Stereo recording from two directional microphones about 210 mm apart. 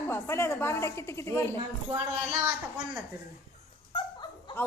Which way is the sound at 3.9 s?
25° left (ahead or behind).